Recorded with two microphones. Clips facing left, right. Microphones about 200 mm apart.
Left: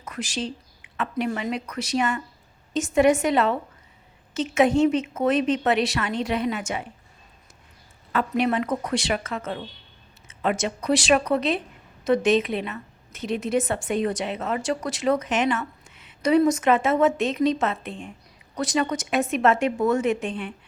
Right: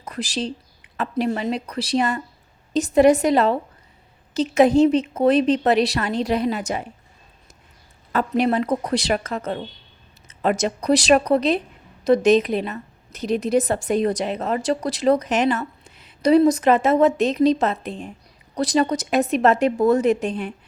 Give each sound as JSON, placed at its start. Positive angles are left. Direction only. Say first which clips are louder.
{"t": 0.0, "sound": "a woman's voice", "louder": "right 3 dB", "side_deg": -35}
{"t": 8.1, "sound": "a woman's voice", "louder": "right 3 dB", "side_deg": -40}